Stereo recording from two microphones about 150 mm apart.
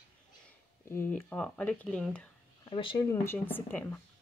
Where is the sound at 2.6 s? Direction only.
35° left (ahead or behind).